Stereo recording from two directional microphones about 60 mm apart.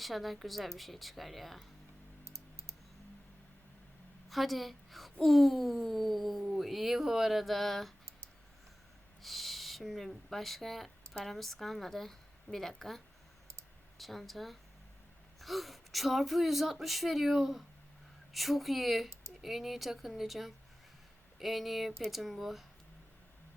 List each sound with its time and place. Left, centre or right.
0.0 s speech: centre
2.2 s typing: right
4.3 s a woman's voice: centre
9.2 s speech: centre
14.0 s speech: centre